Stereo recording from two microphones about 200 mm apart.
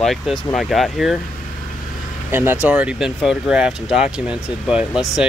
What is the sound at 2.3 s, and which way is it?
Speech, 10° right (ahead or behind).